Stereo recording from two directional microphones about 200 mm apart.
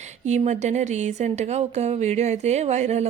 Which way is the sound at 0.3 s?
35° right (ahead or behind).